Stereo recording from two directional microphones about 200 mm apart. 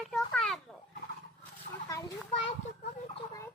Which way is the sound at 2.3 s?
30° left (ahead or behind).